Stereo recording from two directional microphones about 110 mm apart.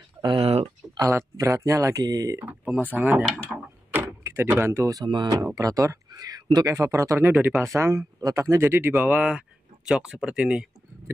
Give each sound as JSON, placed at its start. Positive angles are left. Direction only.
{"t": 0.2, "sound": "a sound", "side_deg": -55}
{"t": 0.9, "sound": "speech", "side_deg": -30}
{"t": 2.3, "sound": "speech", "side_deg": -15}
{"t": 3.5, "sound": "door", "side_deg": -20}
{"t": 5.0, "sound": "speech", "side_deg": -45}